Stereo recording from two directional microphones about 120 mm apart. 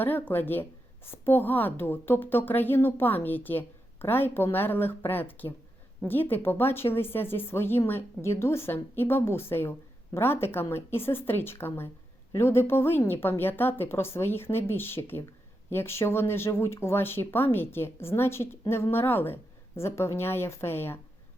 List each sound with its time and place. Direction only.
0.0 s a woman's voice: 15° left (ahead or behind)